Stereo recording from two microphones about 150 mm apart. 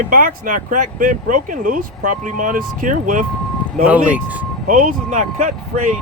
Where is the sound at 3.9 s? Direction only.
10° right (ahead or behind).